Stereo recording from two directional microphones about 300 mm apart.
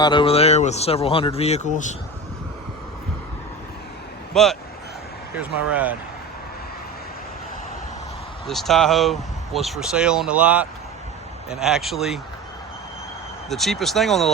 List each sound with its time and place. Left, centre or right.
0.0 s speech: centre
4.4 s speech: centre
8.4 s speech: centre
13.5 s speech: centre